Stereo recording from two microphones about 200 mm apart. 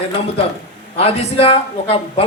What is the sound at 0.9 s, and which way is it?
A man's voice, 30° left (ahead or behind).